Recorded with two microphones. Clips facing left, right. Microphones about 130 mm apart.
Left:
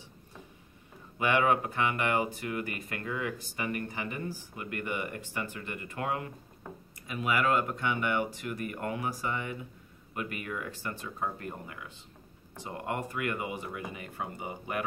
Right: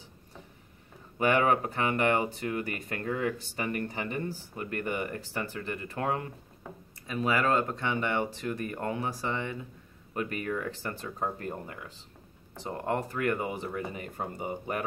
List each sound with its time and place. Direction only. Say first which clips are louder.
1.3 s speech: even; 35° right (ahead or behind)